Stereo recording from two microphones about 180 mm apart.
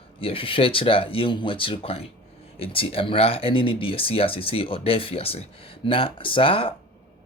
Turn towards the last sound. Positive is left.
turn(degrees=30)  # may be behind; listen again after turning